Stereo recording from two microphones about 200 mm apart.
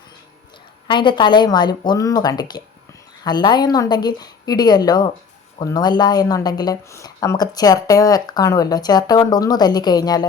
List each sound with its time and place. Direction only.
0.9 s a woman's voice: 25° left (ahead or behind)